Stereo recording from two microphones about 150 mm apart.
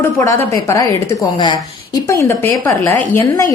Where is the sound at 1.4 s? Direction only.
30° left (ahead or behind).